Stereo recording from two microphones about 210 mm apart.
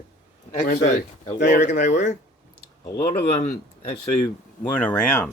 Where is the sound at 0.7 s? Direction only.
40° left (ahead or behind).